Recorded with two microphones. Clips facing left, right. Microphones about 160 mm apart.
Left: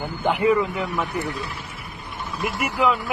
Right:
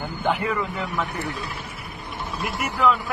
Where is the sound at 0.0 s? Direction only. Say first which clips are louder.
Left 4 dB; 10° left (ahead or behind).